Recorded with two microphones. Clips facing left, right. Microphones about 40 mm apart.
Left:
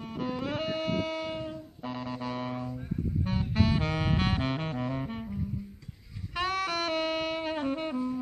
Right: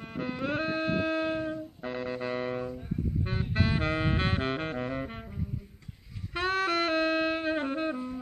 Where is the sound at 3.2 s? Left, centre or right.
Right.